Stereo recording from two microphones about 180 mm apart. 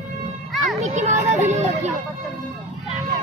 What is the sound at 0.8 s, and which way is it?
A child's voice, 40° right (ahead or behind).